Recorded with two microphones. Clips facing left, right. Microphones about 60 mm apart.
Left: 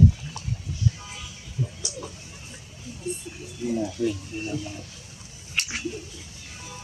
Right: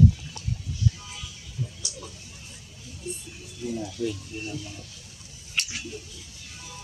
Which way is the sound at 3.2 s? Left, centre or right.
Left.